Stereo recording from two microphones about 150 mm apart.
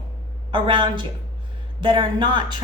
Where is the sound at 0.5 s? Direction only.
35° right (ahead or behind).